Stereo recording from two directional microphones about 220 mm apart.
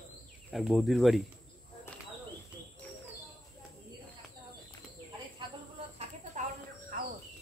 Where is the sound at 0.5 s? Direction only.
Centre (ahead or behind).